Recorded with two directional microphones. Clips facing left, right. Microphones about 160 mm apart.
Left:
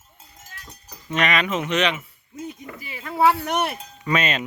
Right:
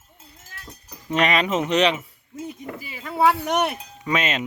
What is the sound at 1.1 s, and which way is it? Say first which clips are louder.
Speech: right 2 dB; 35° right (ahead or behind).